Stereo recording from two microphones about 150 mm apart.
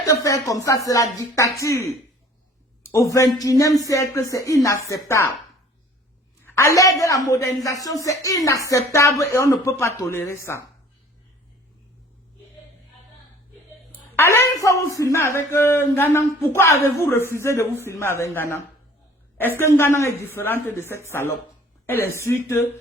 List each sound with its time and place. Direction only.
0.0 s speech: 20° left (ahead or behind)
6.4 s speech: 15° left (ahead or behind)
14.2 s speech: 20° left (ahead or behind)